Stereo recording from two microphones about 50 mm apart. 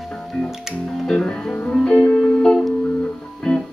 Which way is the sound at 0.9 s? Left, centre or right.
Centre.